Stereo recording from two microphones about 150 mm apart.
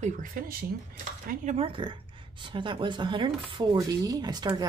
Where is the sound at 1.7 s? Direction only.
35° right (ahead or behind).